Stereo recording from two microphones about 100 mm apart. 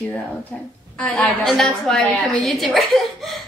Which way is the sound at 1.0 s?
10° left (ahead or behind).